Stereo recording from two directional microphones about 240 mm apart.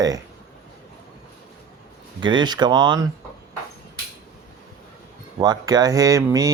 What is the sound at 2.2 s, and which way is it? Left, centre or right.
Speech, centre.